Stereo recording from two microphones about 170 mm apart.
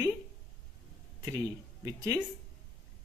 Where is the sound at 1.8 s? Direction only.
20° right (ahead or behind).